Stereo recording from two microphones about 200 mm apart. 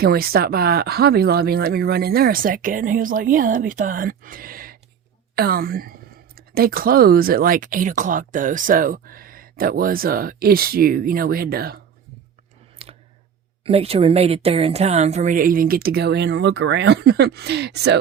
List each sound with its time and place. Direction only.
0.0 s a woman's voice: 50° right (ahead or behind)
12.8 s clicking: 30° right (ahead or behind)
13.7 s a woman's voice: 30° right (ahead or behind); by 17.9 s 55° right (ahead or behind)